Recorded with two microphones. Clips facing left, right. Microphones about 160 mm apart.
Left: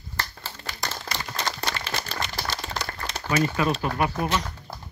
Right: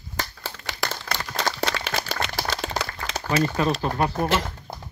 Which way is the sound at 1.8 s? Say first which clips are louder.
Right 3 dB; 90° right.